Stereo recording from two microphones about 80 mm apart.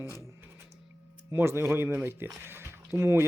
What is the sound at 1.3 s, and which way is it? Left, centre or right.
Speech, right.